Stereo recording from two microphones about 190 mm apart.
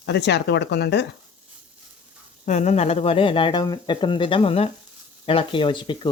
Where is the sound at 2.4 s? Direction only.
40° left (ahead or behind).